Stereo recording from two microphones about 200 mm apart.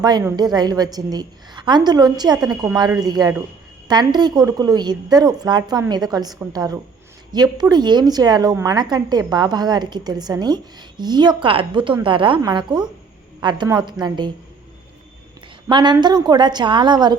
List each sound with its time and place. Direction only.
0.0 s a woman's voice: 20° right (ahead or behind)
15.7 s a woman's voice: 20° right (ahead or behind)